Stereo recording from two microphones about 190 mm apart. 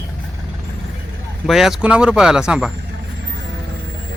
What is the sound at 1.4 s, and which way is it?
Speech, centre (ahead or behind).